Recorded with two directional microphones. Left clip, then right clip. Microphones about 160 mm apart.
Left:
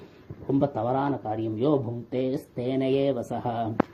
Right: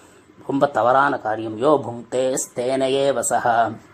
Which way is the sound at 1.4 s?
5° right (ahead or behind).